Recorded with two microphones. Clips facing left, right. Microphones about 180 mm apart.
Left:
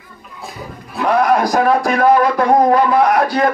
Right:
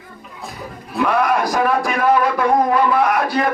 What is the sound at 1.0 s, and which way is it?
Speech, 40° left (ahead or behind).